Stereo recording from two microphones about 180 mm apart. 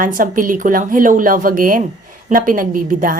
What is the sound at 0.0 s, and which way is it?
A woman's voice, 50° right (ahead or behind).